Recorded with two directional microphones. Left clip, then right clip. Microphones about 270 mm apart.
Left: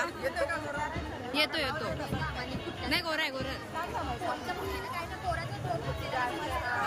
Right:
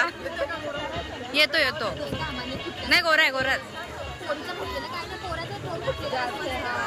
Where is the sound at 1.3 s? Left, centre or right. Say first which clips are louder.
Right 9 dB; centre.